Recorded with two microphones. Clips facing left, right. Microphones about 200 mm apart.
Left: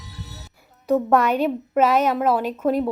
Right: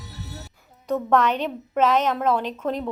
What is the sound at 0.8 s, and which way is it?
A woman's voice, 10° left (ahead or behind).